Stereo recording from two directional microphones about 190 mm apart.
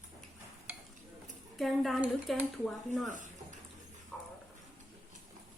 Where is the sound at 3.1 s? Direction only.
40° right (ahead or behind).